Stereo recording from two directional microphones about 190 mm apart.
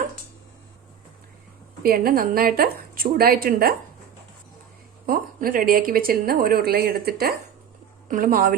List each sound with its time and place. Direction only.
1.8 s speech: 50° right (ahead or behind)
5.0 s speech: 50° right (ahead or behind)